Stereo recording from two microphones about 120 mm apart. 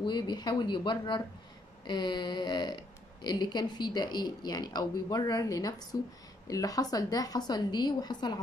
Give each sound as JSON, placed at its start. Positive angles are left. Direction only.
{"t": 0.0, "sound": "speech", "side_deg": 40}